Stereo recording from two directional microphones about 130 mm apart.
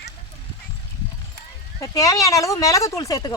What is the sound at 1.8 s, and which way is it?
Speech, 25° left (ahead or behind).